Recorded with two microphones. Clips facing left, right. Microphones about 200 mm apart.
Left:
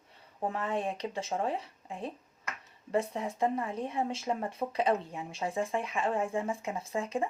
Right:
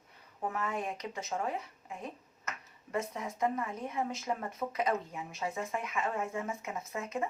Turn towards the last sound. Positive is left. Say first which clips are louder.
# left 4 dB
turn(degrees=30)  # may be behind; listen again after turning